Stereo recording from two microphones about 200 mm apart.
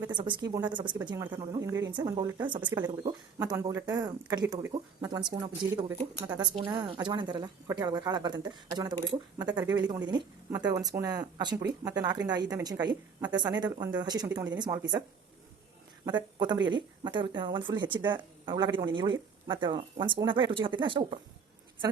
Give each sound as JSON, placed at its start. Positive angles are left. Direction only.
{"t": 0.1, "sound": "speech", "side_deg": -25}
{"t": 16.0, "sound": "speech", "side_deg": -20}